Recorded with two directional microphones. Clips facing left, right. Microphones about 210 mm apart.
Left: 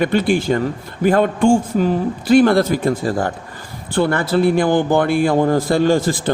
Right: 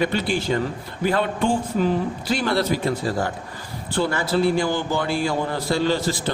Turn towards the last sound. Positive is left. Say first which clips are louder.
# left 6 dB
turn(degrees=50)  # may be behind; listen again after turning